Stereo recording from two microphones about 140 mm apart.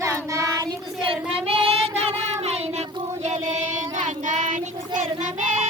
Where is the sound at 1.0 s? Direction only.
40° right (ahead or behind); by 4.6 s 65° right (ahead or behind).